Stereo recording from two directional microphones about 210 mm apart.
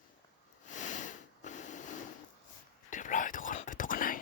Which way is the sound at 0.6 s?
35° left (ahead or behind).